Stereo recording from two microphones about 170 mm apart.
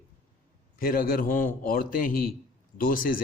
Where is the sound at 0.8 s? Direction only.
60° left (ahead or behind).